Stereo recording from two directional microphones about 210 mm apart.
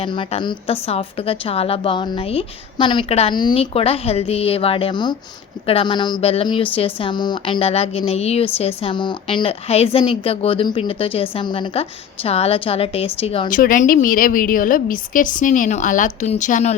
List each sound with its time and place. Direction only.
0.0 s a woman's voice: 25° left (ahead or behind)
13.5 s a woman's voice: 40° left (ahead or behind)